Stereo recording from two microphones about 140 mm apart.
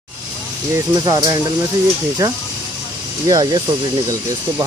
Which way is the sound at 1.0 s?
25° right (ahead or behind).